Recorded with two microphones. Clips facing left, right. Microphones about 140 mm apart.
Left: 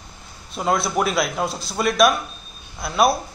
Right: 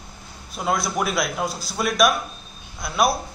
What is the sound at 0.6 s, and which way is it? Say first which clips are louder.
A man's voice: left 3 dB; centre (ahead or behind).